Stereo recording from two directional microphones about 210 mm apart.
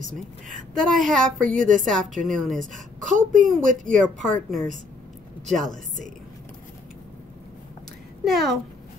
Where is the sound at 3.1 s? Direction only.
40° right (ahead or behind).